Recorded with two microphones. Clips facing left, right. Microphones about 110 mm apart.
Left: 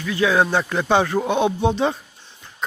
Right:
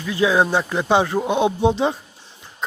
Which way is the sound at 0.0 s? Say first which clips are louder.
Right 1 dB; 25° right (ahead or behind).